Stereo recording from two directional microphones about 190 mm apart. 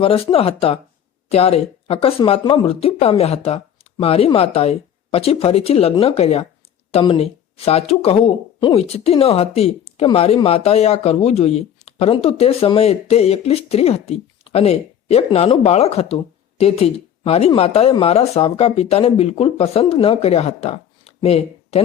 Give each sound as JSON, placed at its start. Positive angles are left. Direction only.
{"t": 0.0, "sound": "speech", "side_deg": 30}